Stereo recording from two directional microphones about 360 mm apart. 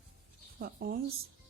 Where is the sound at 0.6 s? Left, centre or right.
Right.